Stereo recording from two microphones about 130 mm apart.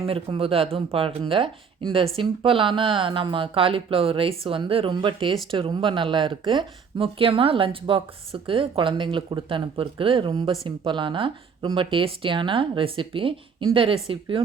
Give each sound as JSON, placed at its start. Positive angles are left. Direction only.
{"t": 0.1, "sound": "speech", "side_deg": -45}